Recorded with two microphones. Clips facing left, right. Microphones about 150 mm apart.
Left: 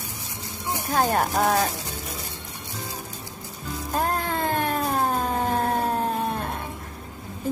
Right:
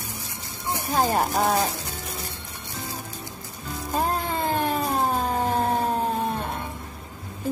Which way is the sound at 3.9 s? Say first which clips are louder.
Even; 5° right (ahead or behind).